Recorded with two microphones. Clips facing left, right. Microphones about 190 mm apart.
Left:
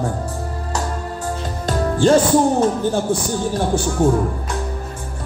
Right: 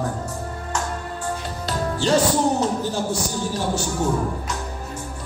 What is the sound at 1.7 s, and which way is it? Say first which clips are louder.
Speech: left 6 dB; 50° left (ahead or behind).